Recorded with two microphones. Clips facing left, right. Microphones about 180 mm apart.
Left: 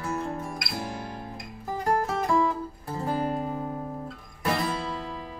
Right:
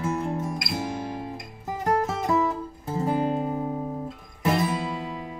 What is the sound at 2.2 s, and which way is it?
Music, 20° right (ahead or behind).